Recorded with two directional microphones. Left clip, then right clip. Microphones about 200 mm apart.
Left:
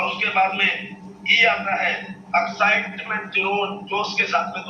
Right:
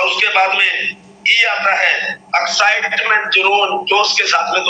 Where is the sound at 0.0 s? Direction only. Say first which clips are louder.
Right 7 dB; 45° right (ahead or behind).